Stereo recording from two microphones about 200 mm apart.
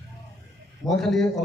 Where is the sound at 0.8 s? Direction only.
Centre (ahead or behind).